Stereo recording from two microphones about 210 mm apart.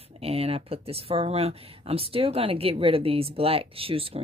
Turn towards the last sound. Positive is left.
turn(degrees=-25)  # may be behind; listen again after turning